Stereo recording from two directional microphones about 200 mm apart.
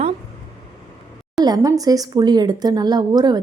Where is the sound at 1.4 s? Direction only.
20° right (ahead or behind).